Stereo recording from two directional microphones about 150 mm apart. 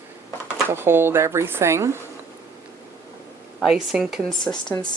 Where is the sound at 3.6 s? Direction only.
Centre (ahead or behind).